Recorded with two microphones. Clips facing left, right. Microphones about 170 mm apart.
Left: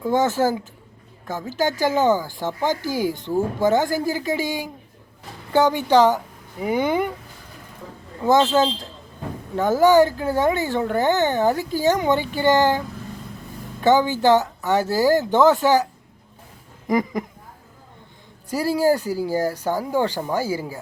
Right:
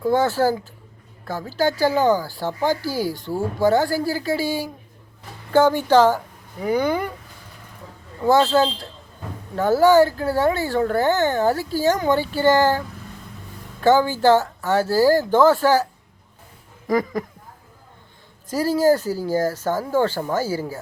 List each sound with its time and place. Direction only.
0.1 s speech: 15° left (ahead or behind)
8.2 s speech: 15° left (ahead or behind)
13.8 s speech: 20° left (ahead or behind)
18.5 s speech: 10° left (ahead or behind)